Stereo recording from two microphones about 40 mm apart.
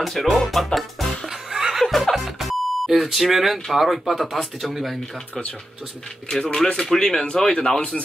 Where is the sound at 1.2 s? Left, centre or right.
Centre.